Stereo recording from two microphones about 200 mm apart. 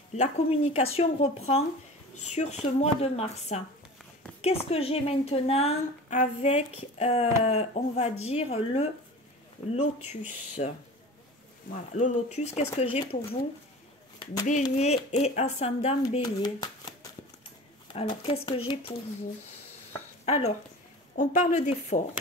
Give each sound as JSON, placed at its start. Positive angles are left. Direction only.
{"t": 0.1, "sound": "a woman's voice", "side_deg": 35}
{"t": 10.6, "sound": "a woman's voice", "side_deg": 40}
{"t": 14.4, "sound": "a woman's voice", "side_deg": 40}
{"t": 16.1, "sound": "speech", "side_deg": 20}
{"t": 17.9, "sound": "speech", "side_deg": 30}
{"t": 20.2, "sound": "a woman's voice", "side_deg": 30}